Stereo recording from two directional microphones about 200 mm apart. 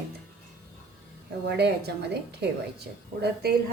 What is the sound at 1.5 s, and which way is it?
A woman's voice, 55° right (ahead or behind).